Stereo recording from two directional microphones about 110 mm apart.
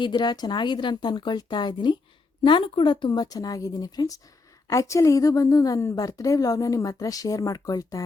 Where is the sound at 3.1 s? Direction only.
35° left (ahead or behind).